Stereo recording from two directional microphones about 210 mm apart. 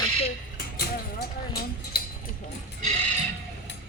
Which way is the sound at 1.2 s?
45° left (ahead or behind).